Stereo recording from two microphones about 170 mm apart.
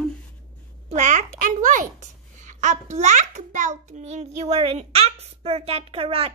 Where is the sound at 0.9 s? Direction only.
45° right (ahead or behind).